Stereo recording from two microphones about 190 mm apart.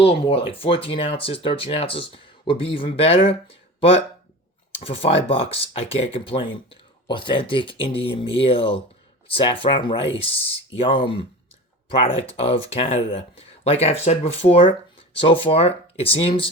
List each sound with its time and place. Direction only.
0.0 s speech: 30° left (ahead or behind)
4.8 s speech: 30° left (ahead or behind)